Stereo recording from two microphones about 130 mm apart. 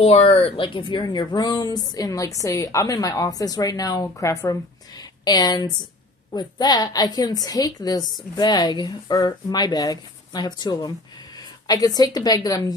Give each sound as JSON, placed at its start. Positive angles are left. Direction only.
{"t": 0.0, "sound": "a woman's voice", "side_deg": 50}